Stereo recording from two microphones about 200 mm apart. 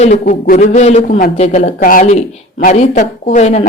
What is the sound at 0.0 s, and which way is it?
A man's voice, 40° left (ahead or behind).